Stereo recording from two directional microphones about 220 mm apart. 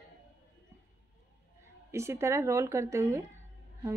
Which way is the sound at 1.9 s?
15° right (ahead or behind).